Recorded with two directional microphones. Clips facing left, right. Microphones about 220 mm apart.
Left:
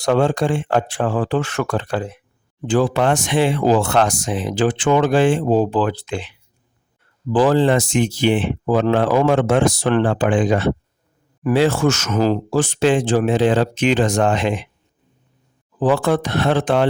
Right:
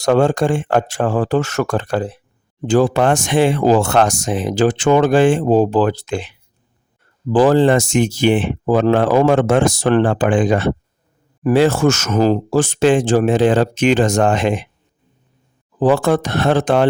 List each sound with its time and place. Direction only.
0.0 s speech: 45° right (ahead or behind)
15.8 s speech: 45° right (ahead or behind)